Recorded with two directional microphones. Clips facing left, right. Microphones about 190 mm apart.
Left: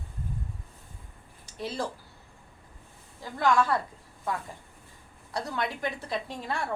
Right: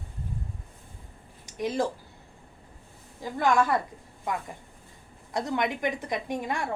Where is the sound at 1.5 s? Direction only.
15° right (ahead or behind).